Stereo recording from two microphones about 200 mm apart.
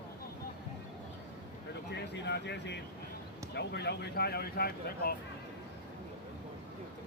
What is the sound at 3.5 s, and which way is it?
Speech, 55° left (ahead or behind).